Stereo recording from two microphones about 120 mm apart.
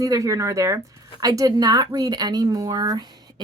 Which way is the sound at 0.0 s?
30° right (ahead or behind).